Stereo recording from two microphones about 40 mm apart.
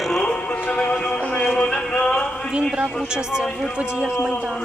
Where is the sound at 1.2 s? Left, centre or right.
Left.